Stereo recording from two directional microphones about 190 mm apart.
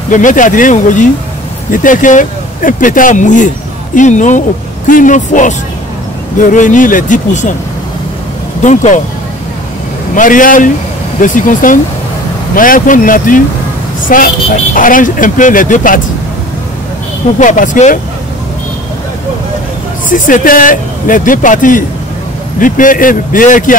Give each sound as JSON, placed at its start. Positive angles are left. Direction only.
{"t": 0.1, "sound": "speech", "side_deg": 40}
{"t": 8.6, "sound": "speech", "side_deg": 40}
{"t": 10.1, "sound": "speech", "side_deg": 45}
{"t": 17.4, "sound": "speech", "side_deg": 40}
{"t": 20.1, "sound": "speech", "side_deg": 45}